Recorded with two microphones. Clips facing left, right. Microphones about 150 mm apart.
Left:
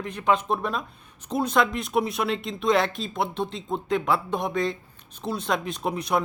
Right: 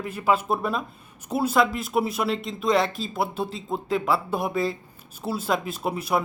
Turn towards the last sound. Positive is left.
turn(degrees=-5)  # may be behind; listen again after turning